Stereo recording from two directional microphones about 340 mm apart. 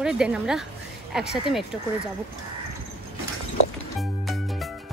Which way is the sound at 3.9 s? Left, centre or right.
Centre.